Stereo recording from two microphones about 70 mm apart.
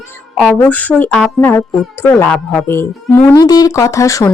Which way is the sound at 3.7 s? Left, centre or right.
Left.